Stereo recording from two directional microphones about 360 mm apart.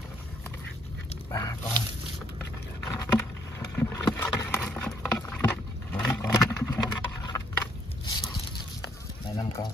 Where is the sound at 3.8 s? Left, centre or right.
Centre.